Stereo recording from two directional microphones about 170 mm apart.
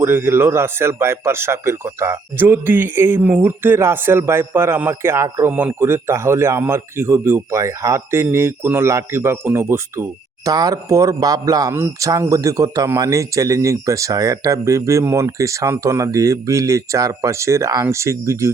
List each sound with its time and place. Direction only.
0.0 s speech: 15° right (ahead or behind)